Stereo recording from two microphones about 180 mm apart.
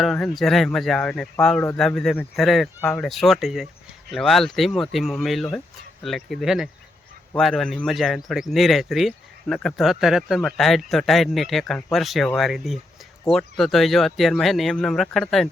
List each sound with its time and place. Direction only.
0.0 s speech: centre (ahead or behind)